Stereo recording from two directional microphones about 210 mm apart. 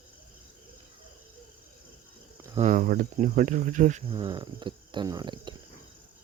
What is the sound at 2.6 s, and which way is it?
Speech, 40° right (ahead or behind).